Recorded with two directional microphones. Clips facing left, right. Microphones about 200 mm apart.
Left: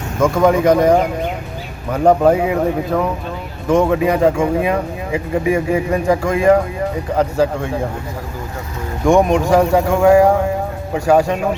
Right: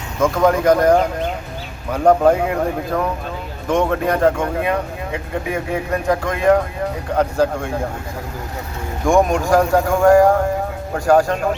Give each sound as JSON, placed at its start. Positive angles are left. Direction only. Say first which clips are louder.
{"t": 0.2, "sound": "speech", "louder": "left 2 dB", "side_deg": 5}
{"t": 9.5, "sound": "speech", "louder": "left 2 dB", "side_deg": 5}